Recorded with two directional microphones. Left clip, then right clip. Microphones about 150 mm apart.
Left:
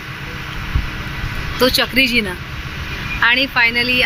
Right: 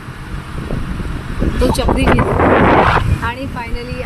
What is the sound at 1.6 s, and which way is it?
Speech, 10° right (ahead or behind).